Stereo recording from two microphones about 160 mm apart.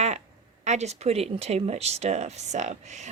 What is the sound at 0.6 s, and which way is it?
Speech, 45° right (ahead or behind).